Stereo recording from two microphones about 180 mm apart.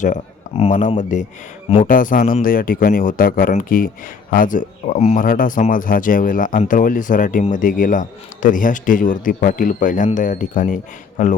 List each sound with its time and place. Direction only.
0.0 s a man's voice: 40° left (ahead or behind)